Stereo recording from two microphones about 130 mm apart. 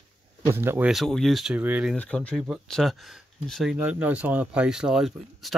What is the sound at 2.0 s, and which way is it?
Speech, 10° left (ahead or behind).